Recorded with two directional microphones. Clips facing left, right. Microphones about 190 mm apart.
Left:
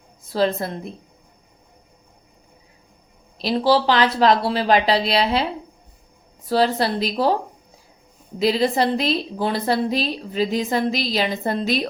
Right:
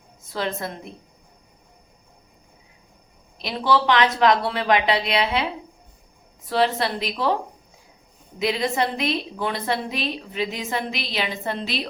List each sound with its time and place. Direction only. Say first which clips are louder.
0.3 s a woman's voice: left 7 dB; 35° left (ahead or behind)
3.3 s a woman's voice: left 4 dB; 35° left (ahead or behind)
6.5 s a woman's voice: left 3 dB; 35° left (ahead or behind)
8.4 s a woman's voice: left 4 dB; 35° left (ahead or behind)